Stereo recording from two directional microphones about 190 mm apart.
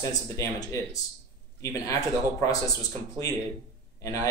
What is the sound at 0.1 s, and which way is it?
Speech, 15° left (ahead or behind).